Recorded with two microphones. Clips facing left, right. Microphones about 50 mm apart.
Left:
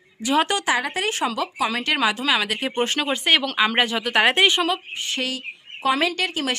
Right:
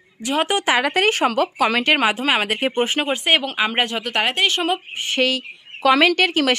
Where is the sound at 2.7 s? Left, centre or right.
Centre.